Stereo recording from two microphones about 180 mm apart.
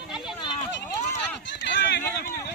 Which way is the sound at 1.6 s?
75° left (ahead or behind).